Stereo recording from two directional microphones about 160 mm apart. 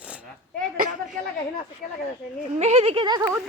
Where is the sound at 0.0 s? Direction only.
10° right (ahead or behind).